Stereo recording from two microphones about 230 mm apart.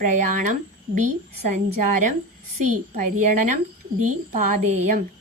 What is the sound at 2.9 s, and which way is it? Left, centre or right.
Speech, right.